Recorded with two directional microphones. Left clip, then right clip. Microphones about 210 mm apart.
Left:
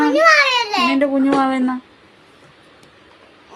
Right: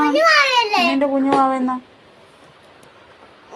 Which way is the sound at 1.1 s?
20° left (ahead or behind).